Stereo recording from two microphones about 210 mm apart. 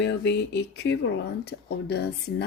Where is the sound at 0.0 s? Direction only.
55° left (ahead or behind).